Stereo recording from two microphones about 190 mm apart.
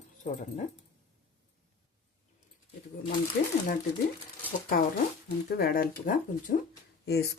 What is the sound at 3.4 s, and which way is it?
Speech, 55° left (ahead or behind).